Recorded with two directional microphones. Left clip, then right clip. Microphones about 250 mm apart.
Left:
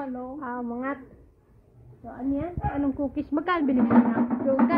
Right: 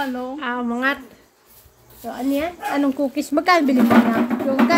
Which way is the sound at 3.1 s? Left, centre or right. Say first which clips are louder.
Right 12 dB; right.